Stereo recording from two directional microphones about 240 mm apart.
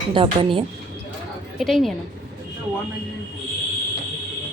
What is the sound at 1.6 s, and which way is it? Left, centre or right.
Speech, centre.